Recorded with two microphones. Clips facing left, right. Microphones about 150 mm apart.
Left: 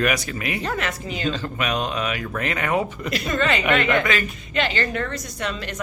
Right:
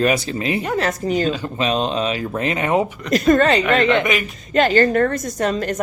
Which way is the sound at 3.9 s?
20° right (ahead or behind).